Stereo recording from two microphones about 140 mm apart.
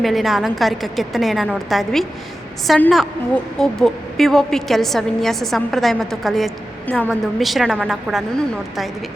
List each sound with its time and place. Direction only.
0.0 s a woman's voice: centre (ahead or behind)